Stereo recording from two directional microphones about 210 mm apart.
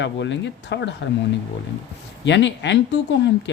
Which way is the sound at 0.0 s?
60° left (ahead or behind).